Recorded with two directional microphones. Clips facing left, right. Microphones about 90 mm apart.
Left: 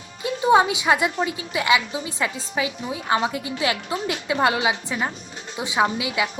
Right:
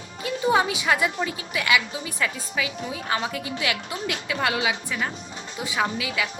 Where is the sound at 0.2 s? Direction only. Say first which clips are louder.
Left 4 dB; 25° left (ahead or behind).